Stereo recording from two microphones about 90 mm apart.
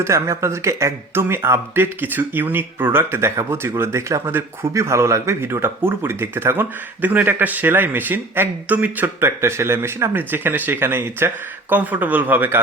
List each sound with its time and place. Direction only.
0.0 s speech: 30° right (ahead or behind)